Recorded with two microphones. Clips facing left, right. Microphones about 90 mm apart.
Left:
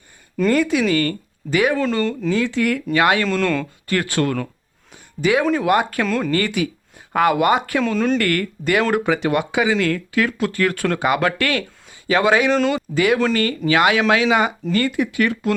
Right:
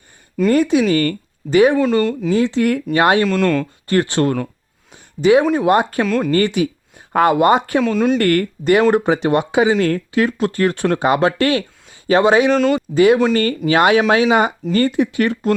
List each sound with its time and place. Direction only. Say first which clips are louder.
0.5 s speech: right 4 dB; 25° right (ahead or behind)
0.9 s speech: right 3 dB; 40° right (ahead or behind)
1.8 s speech: right 4 dB; 10° right (ahead or behind)
2.3 s speech: right 4 dB; 30° right (ahead or behind)
3.2 s speech: right 4 dB; 5° right (ahead or behind)
3.8 s speech: right 4 dB; 25° right (ahead or behind)
6.1 s speech: right 3 dB; 5° right (ahead or behind)
6.3 s speech: right 4 dB; 30° right (ahead or behind)
7.8 s speech: right 3 dB; 5° right (ahead or behind)
8.2 s speech: right 5 dB; 30° right (ahead or behind)